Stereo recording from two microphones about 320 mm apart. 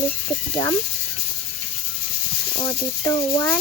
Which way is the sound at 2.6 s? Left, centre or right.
Centre.